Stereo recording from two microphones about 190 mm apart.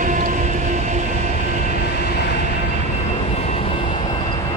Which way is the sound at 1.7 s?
60° left (ahead or behind).